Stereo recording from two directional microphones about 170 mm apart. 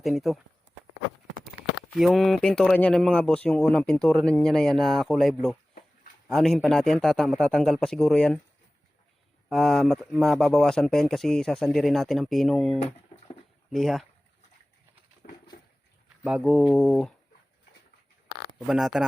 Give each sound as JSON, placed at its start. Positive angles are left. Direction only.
{"t": 0.0, "sound": "speech", "side_deg": 0}
{"t": 2.0, "sound": "speech", "side_deg": 0}
{"t": 9.5, "sound": "speech", "side_deg": 0}
{"t": 15.2, "sound": "a sound", "side_deg": 55}
{"t": 16.2, "sound": "speech", "side_deg": -5}
{"t": 18.7, "sound": "speech", "side_deg": 0}